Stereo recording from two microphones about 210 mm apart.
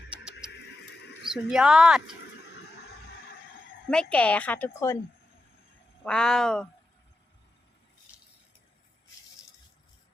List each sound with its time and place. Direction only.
0.1 s music: 5° right (ahead or behind)
0.5 s a sound: 55° left (ahead or behind)
1.2 s speech: centre (ahead or behind)
3.8 s a woman's voice: 5° left (ahead or behind)
6.1 s speech: 5° left (ahead or behind)